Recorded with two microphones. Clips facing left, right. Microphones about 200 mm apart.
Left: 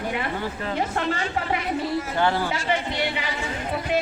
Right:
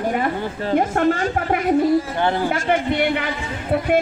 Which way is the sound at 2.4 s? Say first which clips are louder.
Right 6 dB; 50° right (ahead or behind).